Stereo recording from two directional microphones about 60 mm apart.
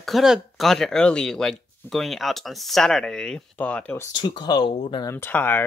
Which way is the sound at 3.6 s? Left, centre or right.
Left.